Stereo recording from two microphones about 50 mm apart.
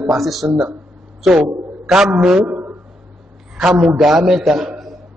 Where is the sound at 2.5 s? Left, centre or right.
Right.